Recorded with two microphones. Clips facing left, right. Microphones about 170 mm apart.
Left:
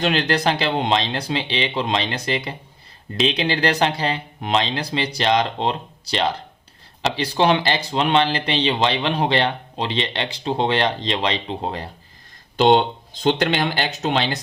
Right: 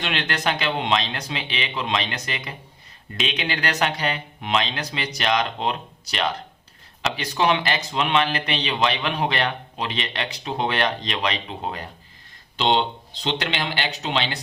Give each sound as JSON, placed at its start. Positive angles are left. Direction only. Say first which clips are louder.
{"t": 0.0, "sound": "speech", "louder": "left 6 dB", "side_deg": 40}
{"t": 12.5, "sound": "speech", "louder": "left 6 dB", "side_deg": 50}